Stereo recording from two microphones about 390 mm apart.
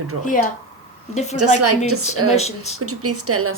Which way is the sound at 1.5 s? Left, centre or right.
Right.